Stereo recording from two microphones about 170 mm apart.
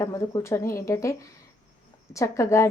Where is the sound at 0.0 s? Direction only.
15° left (ahead or behind).